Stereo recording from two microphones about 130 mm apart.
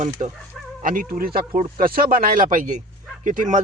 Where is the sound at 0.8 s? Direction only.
90° right.